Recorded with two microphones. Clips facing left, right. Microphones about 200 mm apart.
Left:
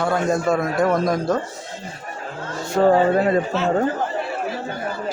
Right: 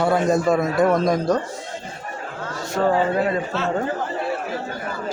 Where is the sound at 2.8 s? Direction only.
30° left (ahead or behind).